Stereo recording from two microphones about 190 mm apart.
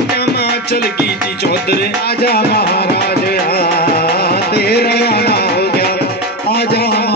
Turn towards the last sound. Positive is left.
turn(degrees=55)  # may be behind; listen again after turning